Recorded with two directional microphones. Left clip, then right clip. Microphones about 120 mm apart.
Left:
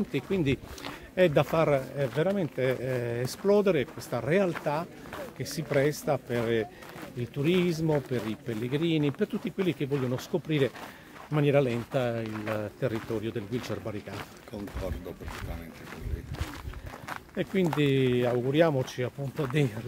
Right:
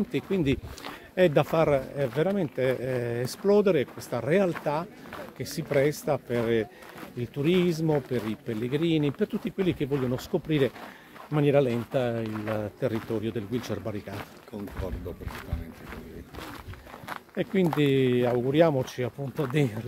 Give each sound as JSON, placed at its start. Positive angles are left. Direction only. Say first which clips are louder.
{"t": 0.1, "sound": "speech", "louder": "right 1 dB", "side_deg": -40}
{"t": 17.1, "sound": "speech", "louder": "right 2 dB", "side_deg": -35}